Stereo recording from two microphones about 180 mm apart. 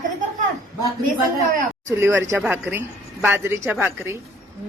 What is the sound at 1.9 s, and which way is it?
A woman's voice, 15° right (ahead or behind).